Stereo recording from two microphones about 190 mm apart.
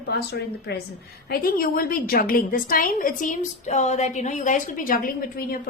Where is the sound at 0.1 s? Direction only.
60° left (ahead or behind).